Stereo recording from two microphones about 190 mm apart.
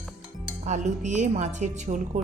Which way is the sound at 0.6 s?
40° right (ahead or behind).